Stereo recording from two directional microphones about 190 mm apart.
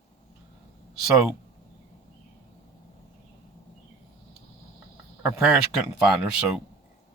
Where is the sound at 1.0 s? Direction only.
Centre (ahead or behind).